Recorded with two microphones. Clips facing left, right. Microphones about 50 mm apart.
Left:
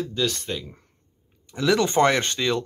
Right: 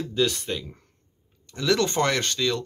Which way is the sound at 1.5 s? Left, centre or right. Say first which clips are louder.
Left 3 dB; centre.